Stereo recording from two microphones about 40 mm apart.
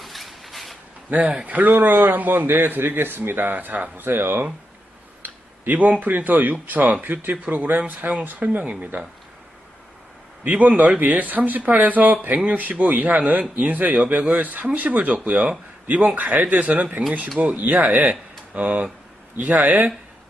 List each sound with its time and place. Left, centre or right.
0.0 s a sound: centre
1.1 s speech: right
3.9 s speech: right
5.2 s a sound: right
6.0 s speech: right
10.4 s speech: right